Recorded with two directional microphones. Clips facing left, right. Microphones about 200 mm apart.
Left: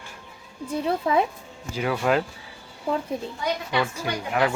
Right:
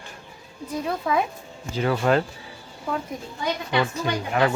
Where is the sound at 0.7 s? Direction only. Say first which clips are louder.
Left 2 dB; 25° left (ahead or behind).